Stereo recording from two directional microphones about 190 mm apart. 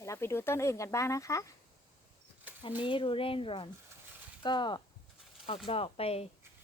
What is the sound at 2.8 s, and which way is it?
Speech, 25° left (ahead or behind).